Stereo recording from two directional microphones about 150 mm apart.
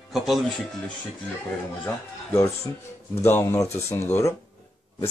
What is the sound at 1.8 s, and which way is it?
Speech, 15° left (ahead or behind).